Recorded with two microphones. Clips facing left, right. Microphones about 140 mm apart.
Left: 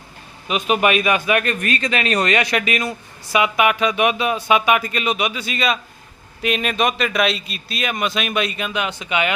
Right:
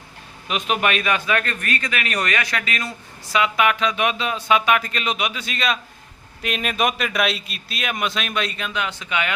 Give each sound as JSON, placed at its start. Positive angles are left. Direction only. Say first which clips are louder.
{"t": 0.4, "sound": "a man's voice", "louder": "left 4 dB", "side_deg": 5}